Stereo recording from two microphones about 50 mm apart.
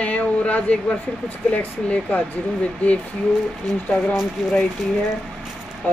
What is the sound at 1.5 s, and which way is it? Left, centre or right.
Speech, left.